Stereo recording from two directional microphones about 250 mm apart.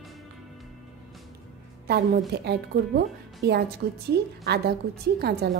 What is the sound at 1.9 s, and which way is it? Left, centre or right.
Speech, right.